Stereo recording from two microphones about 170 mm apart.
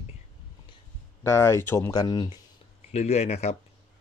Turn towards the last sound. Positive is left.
turn(degrees=40)  # may be behind; listen again after turning